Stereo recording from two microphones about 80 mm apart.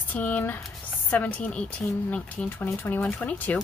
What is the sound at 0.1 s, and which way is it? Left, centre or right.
A woman's voice, centre.